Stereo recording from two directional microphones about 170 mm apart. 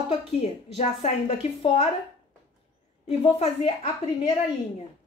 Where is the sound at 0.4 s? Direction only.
40° left (ahead or behind).